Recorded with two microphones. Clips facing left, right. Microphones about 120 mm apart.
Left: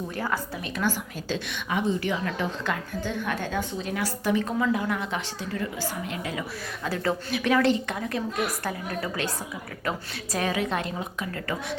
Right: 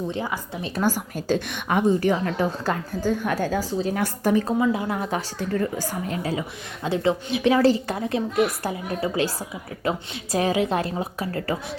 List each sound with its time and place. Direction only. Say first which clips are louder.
0.8 s a woman's voice: right 5 dB; 45° right (ahead or behind)
4.0 s a woman's voice: right 2 dB; 45° right (ahead or behind)
4.6 s a woman's voice: right 2 dB; 25° right (ahead or behind)
4.9 s a woman's voice: right 4 dB; 40° right (ahead or behind)
6.8 s a woman's voice: right 5 dB; 25° right (ahead or behind)